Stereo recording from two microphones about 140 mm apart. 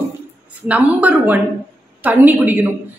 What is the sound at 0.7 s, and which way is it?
A man's voice, 10° right (ahead or behind).